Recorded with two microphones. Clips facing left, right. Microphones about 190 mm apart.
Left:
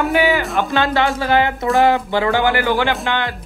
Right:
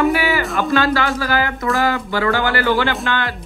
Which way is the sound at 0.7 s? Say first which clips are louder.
Right 1 dB; 20° left (ahead or behind).